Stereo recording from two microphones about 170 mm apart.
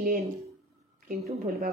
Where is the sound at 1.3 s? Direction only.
65° right (ahead or behind).